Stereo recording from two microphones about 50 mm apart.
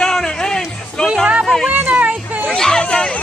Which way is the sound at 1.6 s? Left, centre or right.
Right.